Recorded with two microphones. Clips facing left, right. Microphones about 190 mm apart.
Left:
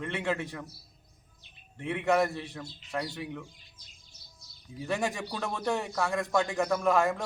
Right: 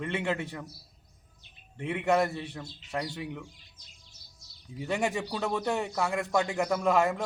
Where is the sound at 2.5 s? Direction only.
10° right (ahead or behind).